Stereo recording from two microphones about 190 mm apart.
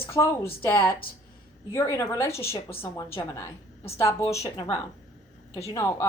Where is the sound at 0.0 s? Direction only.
15° left (ahead or behind).